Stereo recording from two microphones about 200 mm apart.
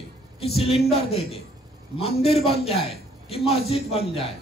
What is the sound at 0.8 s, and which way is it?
Speech, 30° left (ahead or behind).